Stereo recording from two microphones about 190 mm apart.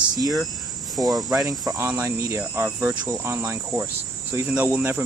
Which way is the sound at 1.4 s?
15° right (ahead or behind).